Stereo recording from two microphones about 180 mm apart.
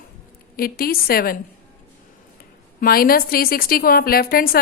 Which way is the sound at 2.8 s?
55° left (ahead or behind).